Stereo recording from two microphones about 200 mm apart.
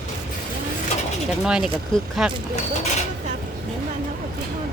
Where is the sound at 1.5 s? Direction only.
5° right (ahead or behind).